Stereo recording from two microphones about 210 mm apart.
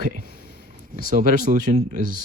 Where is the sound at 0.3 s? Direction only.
50° left (ahead or behind).